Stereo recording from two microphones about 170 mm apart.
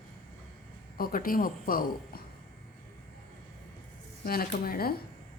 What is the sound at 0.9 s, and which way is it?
A man's voice, 60° left (ahead or behind).